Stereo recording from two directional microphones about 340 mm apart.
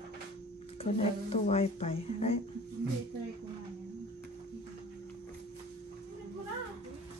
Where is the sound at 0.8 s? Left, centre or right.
Centre.